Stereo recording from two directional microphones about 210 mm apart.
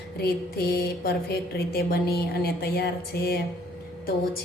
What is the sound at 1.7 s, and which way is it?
A woman's voice, 50° left (ahead or behind).